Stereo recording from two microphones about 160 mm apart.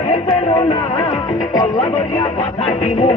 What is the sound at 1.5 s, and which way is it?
Music, 20° left (ahead or behind).